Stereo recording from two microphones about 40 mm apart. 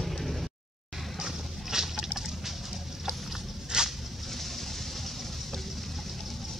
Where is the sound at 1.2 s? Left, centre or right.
Centre.